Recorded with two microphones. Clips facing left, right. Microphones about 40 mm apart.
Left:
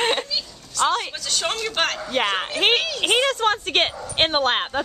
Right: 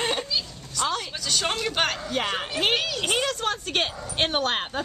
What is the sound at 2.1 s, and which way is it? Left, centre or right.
Speech, left.